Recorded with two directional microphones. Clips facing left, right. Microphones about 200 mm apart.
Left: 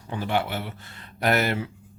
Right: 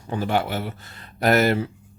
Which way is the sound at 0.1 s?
40° right (ahead or behind).